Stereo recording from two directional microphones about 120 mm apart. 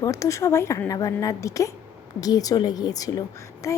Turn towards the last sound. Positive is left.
turn(degrees=25)  # may be behind; listen again after turning